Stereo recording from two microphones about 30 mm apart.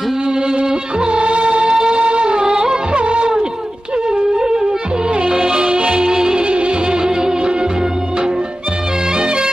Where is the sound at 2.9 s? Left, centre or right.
Right.